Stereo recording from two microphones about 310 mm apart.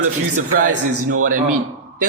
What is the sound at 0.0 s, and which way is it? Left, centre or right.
A man's voice, right.